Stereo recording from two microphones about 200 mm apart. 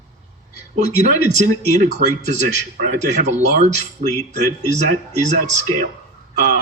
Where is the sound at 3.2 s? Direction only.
35° right (ahead or behind).